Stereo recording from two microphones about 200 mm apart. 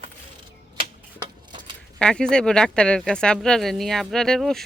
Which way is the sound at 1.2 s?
25° right (ahead or behind).